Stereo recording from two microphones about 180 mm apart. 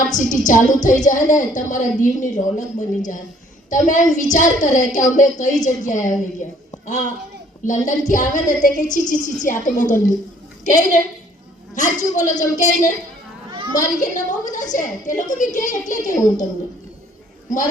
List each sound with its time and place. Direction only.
0.1 s a woman's voice: 45° left (ahead or behind)